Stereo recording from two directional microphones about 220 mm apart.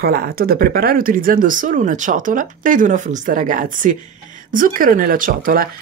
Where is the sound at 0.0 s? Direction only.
45° right (ahead or behind).